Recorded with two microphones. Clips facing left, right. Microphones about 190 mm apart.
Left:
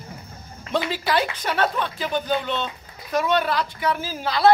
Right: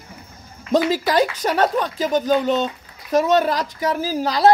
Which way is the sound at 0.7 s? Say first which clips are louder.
Right 6 dB; 40° right (ahead or behind).